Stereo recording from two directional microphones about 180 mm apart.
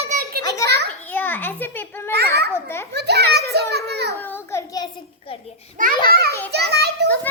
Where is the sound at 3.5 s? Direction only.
60° right (ahead or behind).